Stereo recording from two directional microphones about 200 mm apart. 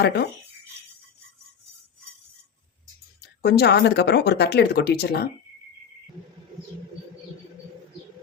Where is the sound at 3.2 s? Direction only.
55° left (ahead or behind).